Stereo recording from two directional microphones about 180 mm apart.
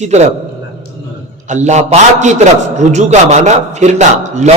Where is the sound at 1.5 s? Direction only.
40° right (ahead or behind).